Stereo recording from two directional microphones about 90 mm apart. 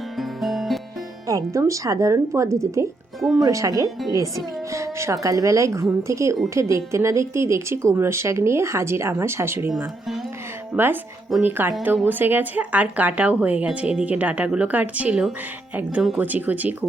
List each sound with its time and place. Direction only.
0.2 s music: centre (ahead or behind)
1.3 s speech: 35° right (ahead or behind)
10.7 s speech: 5° right (ahead or behind)
11.3 s speech: 25° right (ahead or behind)